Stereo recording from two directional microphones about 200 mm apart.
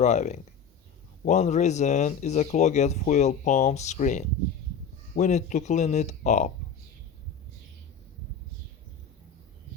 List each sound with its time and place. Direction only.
0.0 s speech: 35° left (ahead or behind)